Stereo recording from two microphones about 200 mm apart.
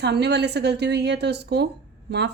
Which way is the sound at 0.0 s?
55° right (ahead or behind).